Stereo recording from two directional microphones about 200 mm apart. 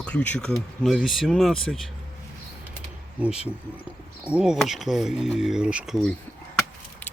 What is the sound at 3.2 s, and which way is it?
Speech, 5° right (ahead or behind).